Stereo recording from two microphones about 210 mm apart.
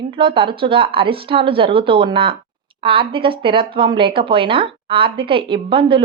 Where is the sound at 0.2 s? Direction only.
25° right (ahead or behind).